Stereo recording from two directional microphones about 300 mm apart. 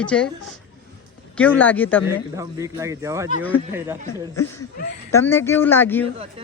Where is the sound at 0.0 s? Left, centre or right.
Centre.